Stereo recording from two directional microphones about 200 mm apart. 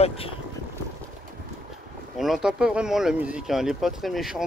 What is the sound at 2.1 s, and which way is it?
Speech, centre (ahead or behind).